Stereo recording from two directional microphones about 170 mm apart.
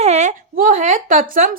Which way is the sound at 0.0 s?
40° right (ahead or behind).